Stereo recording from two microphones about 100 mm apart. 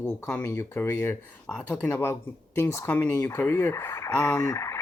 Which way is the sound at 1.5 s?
15° left (ahead or behind).